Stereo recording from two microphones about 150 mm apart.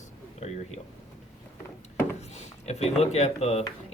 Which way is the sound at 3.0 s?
45° left (ahead or behind).